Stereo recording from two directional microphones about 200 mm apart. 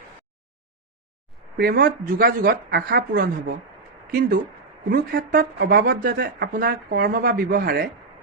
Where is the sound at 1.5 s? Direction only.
50° right (ahead or behind).